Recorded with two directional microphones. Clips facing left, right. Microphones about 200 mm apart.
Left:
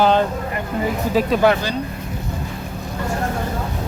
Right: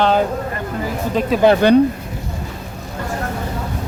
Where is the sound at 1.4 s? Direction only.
20° right (ahead or behind).